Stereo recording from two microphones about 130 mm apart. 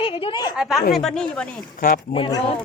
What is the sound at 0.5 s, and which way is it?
Speech, 5° right (ahead or behind).